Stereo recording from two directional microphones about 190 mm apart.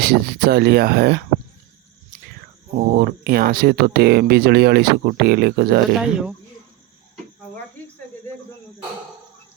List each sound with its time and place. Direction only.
0.0 s speech: 55° right (ahead or behind)
2.7 s speech: 50° right (ahead or behind)
6.0 s speech: 5° right (ahead or behind)